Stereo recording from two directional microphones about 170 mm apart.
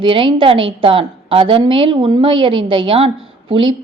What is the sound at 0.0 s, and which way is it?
A woman's voice, 30° right (ahead or behind).